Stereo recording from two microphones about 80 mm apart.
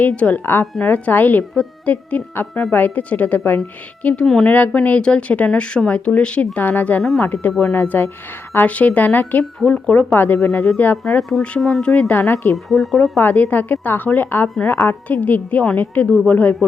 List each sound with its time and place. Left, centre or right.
0.0 s a woman's voice: centre
4.0 s speech: centre
4.4 s a woman's voice: centre
11.2 s speech: centre
12.2 s speech: left
12.6 s speech: centre
13.1 s a woman's voice: left